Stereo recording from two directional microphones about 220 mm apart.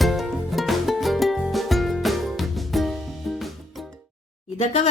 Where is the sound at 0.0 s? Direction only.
Centre (ahead or behind).